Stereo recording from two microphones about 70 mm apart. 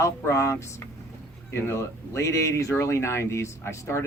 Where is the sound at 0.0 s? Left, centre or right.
Left.